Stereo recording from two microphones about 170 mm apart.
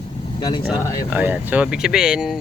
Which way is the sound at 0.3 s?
25° left (ahead or behind).